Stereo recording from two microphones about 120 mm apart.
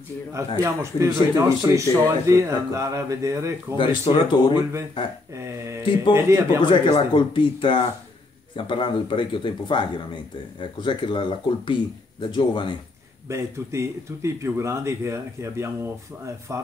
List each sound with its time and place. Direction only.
0.6 s speech: 25° right (ahead or behind)
3.7 s speech: 45° left (ahead or behind)
5.3 s speech: 25° right (ahead or behind)
5.8 s speech: 45° left (ahead or behind)
6.1 s speech: 25° right (ahead or behind)
6.6 s speech: 45° left (ahead or behind)
13.3 s speech: 25° right (ahead or behind)